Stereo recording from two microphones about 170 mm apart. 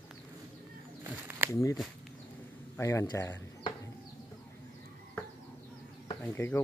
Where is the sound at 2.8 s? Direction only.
15° left (ahead or behind).